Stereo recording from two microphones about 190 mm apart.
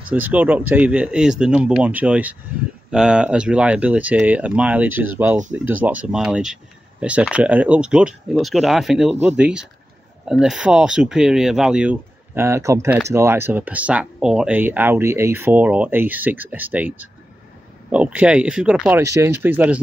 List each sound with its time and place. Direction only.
0.1 s speech: 10° right (ahead or behind)
9.1 s speech: 35° right (ahead or behind)
9.4 s speech: 5° right (ahead or behind)